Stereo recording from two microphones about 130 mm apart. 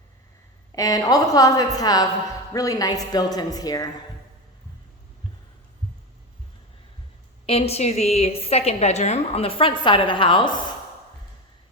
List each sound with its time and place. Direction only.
0.7 s a woman's voice: 25° left (ahead or behind)
7.4 s a woman's voice: 50° left (ahead or behind)